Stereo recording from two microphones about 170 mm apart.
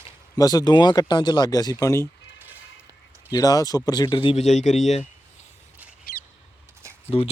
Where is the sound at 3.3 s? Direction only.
20° left (ahead or behind); by 5.0 s 40° left (ahead or behind).